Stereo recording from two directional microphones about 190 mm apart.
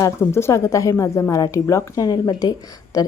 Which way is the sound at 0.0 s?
15° left (ahead or behind).